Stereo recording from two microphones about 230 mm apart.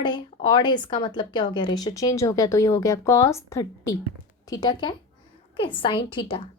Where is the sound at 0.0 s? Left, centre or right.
Centre.